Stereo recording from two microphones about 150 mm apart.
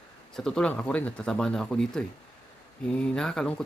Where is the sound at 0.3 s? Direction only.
5° left (ahead or behind).